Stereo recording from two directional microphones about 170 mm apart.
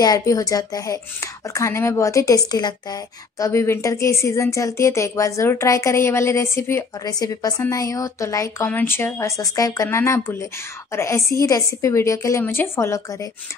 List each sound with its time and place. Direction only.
0.0 s speech: 20° left (ahead or behind)